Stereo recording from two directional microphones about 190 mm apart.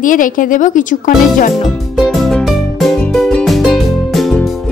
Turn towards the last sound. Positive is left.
turn(degrees=0)  # may be behind; listen again after turning